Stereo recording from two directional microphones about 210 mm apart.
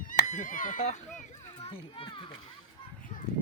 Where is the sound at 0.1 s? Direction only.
40° left (ahead or behind).